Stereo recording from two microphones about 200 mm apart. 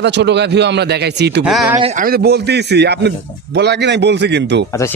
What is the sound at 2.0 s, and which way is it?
A man's voice, 50° right (ahead or behind).